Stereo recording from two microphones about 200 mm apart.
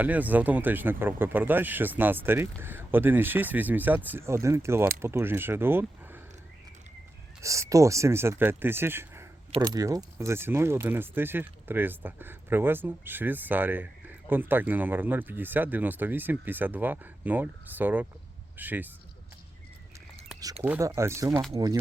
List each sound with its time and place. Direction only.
0.0 s speech: 10° right (ahead or behind)
7.4 s speech: 15° right (ahead or behind)
20.7 s speech: 15° right (ahead or behind)